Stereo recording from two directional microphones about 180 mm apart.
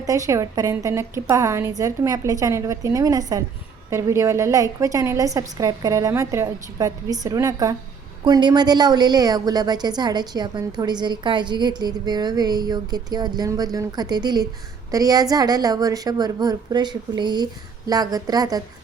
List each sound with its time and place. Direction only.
0.0 s a woman's voice: 20° right (ahead or behind)